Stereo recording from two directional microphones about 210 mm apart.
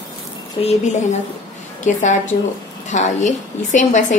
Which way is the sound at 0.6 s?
25° left (ahead or behind).